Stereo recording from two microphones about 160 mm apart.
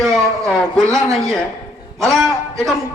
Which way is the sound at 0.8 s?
20° right (ahead or behind).